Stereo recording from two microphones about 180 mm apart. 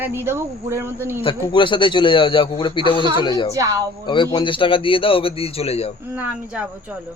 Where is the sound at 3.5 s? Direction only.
20° right (ahead or behind).